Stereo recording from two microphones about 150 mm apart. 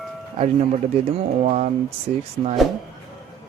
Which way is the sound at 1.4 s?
50° right (ahead or behind).